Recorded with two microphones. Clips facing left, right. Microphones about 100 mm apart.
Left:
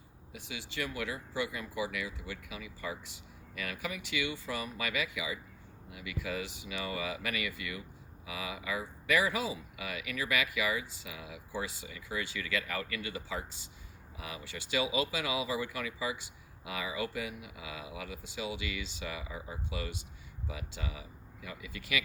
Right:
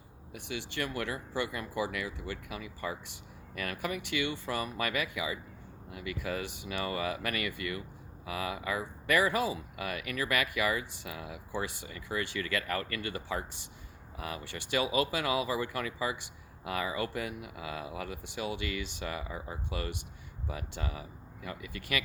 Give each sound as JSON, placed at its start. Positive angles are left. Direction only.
{"t": 0.3, "sound": "speech", "side_deg": -55}